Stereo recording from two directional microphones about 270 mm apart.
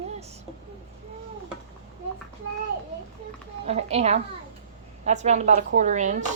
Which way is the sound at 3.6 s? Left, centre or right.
Right.